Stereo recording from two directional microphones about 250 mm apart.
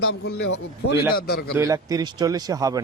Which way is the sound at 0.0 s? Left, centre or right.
Left.